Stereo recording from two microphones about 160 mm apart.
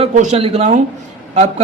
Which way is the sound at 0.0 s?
45° right (ahead or behind).